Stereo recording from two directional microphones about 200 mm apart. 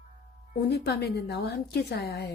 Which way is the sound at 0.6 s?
55° left (ahead or behind).